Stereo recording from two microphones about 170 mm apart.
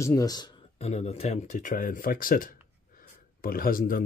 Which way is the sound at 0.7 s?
35° left (ahead or behind).